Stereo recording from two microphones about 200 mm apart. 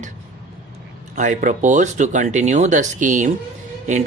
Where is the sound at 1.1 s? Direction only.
40° right (ahead or behind).